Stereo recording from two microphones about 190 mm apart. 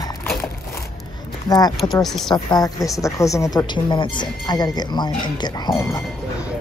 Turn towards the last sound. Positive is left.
turn(degrees=20)  # may be behind; listen again after turning